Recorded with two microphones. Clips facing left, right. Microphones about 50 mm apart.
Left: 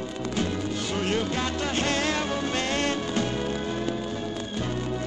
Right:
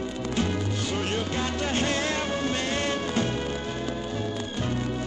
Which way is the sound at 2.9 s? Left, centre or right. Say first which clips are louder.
Even; right.